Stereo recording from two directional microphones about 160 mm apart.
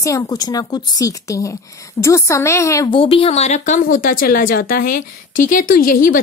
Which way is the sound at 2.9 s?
35° left (ahead or behind).